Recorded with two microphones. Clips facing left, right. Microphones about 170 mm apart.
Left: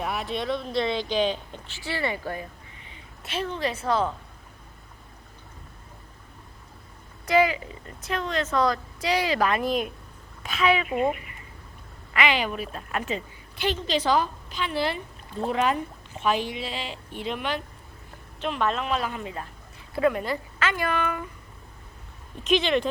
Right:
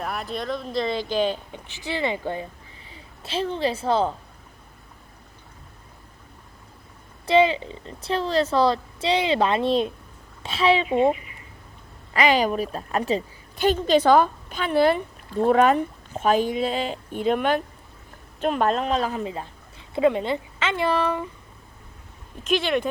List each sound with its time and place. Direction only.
0.0 s speech: centre (ahead or behind)
1.6 s a woman's voice: 15° right (ahead or behind)
7.3 s a woman's voice: 25° right (ahead or behind)
12.1 s a woman's voice: 40° right (ahead or behind)
22.4 s speech: 5° right (ahead or behind)